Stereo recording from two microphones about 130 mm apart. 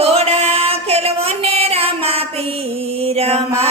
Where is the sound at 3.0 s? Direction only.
50° right (ahead or behind).